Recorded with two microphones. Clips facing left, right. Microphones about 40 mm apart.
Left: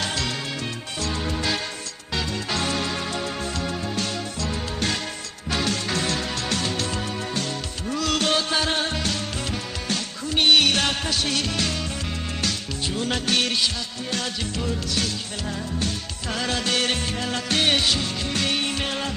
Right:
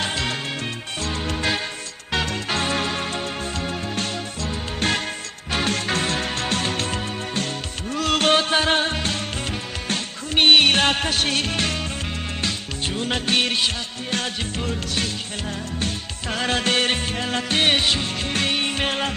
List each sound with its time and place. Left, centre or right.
0.0 s music: right
3.9 s music: right
13.0 s music: right
14.1 s music: right